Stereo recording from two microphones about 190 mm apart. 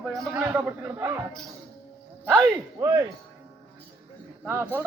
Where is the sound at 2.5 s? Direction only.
15° right (ahead or behind).